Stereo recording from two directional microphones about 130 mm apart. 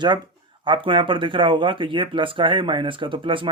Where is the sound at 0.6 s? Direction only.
40° right (ahead or behind).